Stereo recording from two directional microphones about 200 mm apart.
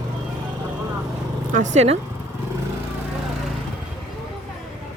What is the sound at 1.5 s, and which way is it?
Speech, 35° right (ahead or behind).